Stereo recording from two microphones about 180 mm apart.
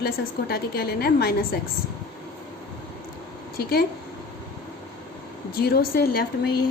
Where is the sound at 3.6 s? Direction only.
60° left (ahead or behind).